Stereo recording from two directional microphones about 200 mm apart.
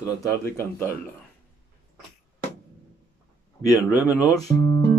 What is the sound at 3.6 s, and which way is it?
Speech, 15° left (ahead or behind).